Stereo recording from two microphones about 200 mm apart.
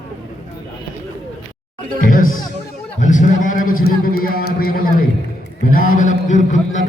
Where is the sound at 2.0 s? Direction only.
45° left (ahead or behind).